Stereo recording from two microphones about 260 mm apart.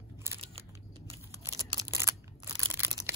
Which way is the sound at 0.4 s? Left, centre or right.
Right.